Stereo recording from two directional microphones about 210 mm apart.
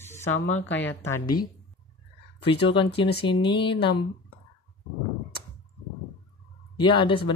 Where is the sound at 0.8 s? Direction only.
10° left (ahead or behind).